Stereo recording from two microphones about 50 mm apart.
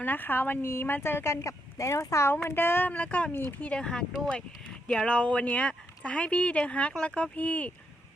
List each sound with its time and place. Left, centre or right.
0.0 s speech: left
0.6 s speech: left
2.3 s speech: left
2.9 s speech: left
3.8 s speech: centre